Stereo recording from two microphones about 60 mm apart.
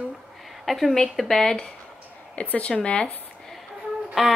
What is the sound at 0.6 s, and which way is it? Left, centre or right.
Speech, centre.